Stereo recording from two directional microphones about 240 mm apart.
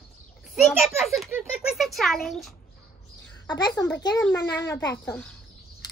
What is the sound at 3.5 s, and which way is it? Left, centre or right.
A woman's voice, centre.